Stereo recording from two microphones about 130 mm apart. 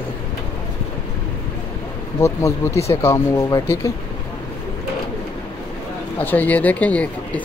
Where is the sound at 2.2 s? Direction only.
25° left (ahead or behind).